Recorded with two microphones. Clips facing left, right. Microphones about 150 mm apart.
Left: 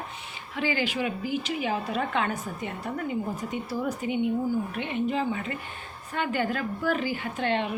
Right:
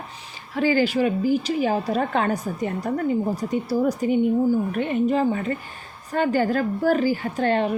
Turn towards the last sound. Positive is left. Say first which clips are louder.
# right 6 dB
turn(degrees=-40)  # may be behind; listen again after turning